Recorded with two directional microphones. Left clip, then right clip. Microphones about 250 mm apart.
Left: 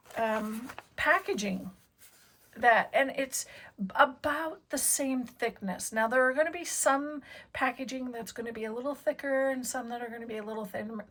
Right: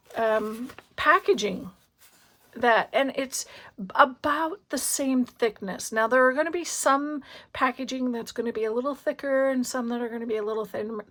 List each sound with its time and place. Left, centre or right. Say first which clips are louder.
0.2 s a sound: right 6 dB; centre
0.5 s speech: right 3 dB; centre
0.9 s speech: right 7 dB; right
2.6 s a woman's voice: right 2 dB; centre